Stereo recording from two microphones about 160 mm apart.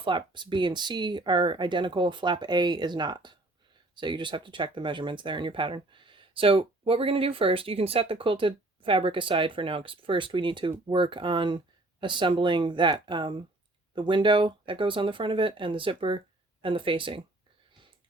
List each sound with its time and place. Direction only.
0.0 s speech: 30° right (ahead or behind)